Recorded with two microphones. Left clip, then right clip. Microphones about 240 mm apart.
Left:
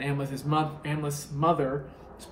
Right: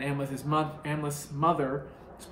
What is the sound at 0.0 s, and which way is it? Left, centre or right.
Speech, centre.